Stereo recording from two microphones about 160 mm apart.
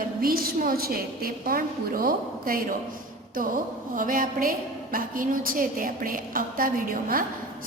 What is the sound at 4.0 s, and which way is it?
A woman's voice, 60° right (ahead or behind).